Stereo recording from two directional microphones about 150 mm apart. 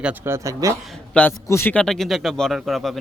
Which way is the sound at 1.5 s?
15° left (ahead or behind).